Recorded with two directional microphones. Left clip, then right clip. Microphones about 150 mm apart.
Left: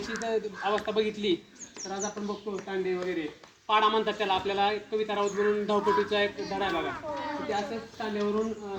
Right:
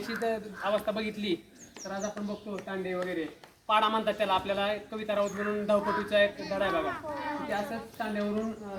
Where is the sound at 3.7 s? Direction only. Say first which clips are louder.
Left 2 dB; 15° right (ahead or behind).